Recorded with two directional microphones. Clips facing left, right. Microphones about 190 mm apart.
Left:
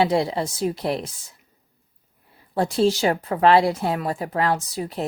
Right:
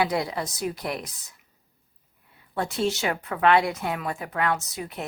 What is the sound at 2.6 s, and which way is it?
Speech, 30° left (ahead or behind).